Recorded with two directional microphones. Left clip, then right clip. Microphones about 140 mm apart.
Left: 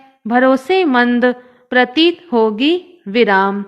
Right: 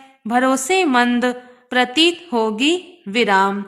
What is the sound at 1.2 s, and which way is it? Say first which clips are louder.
A woman's voice: left 6 dB; 30° left (ahead or behind).